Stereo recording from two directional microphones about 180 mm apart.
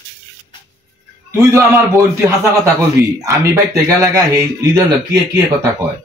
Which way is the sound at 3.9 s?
15° right (ahead or behind).